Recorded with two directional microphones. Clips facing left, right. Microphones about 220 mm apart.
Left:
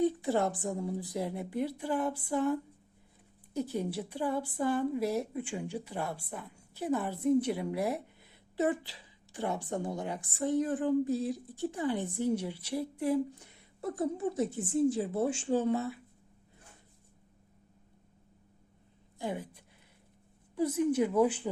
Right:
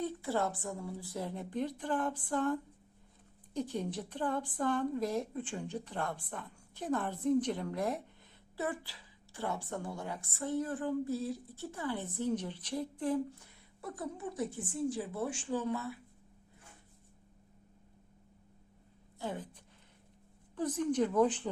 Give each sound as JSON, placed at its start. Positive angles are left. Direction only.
{"t": 0.0, "sound": "a woman's voice", "side_deg": 20}
{"t": 8.5, "sound": "a woman's voice", "side_deg": 20}
{"t": 19.2, "sound": "a woman's voice", "side_deg": 10}